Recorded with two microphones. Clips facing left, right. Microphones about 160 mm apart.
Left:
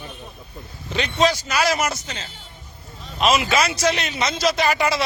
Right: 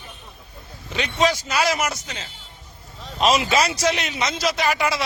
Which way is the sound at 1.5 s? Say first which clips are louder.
Left 1 dB; 25° right (ahead or behind).